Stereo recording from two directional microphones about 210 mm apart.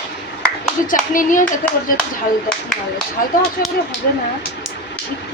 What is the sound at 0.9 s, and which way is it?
Speech, 40° left (ahead or behind).